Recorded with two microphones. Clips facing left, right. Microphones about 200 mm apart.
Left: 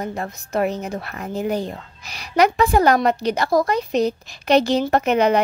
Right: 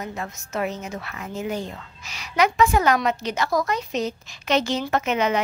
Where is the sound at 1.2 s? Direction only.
35° left (ahead or behind).